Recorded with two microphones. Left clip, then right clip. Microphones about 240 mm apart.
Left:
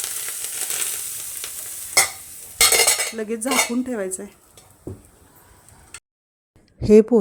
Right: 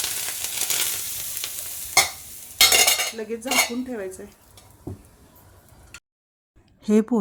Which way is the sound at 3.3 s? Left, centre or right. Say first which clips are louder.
Left 2 dB; left.